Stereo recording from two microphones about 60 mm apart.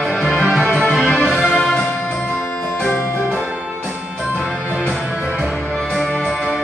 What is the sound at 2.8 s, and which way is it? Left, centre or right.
Music, left.